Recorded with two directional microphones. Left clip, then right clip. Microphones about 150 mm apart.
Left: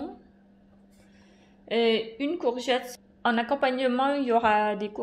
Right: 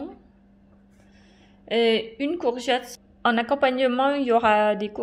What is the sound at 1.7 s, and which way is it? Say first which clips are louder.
A woman's voice: right 3 dB; 25° right (ahead or behind).